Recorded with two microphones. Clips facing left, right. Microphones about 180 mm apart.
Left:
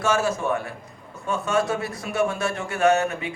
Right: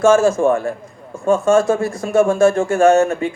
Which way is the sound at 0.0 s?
45° right (ahead or behind).